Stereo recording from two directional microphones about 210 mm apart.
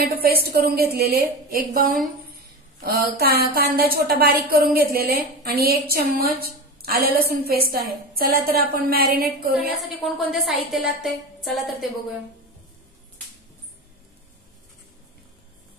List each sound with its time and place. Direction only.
0.0 s a woman's voice: 45° right (ahead or behind)
10.0 s a woman's voice: centre (ahead or behind)